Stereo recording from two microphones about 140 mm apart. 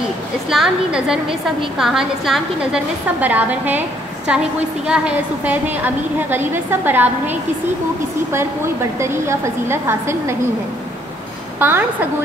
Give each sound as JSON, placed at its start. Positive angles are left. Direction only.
{"t": 0.5, "sound": "a woman's voice", "side_deg": -5}
{"t": 9.0, "sound": "a woman's voice", "side_deg": -20}
{"t": 11.6, "sound": "a woman's voice", "side_deg": -15}